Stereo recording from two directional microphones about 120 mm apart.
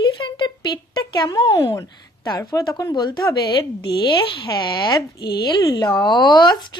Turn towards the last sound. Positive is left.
turn(degrees=40)  # may be behind; listen again after turning